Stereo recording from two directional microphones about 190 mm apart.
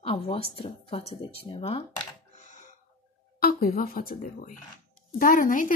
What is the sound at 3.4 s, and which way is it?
Speech, 50° left (ahead or behind).